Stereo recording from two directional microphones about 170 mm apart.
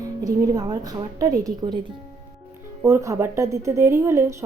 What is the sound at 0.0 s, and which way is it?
A woman's voice, 20° right (ahead or behind).